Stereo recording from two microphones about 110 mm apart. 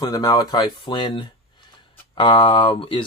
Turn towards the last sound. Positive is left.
turn(degrees=55)  # may be behind; listen again after turning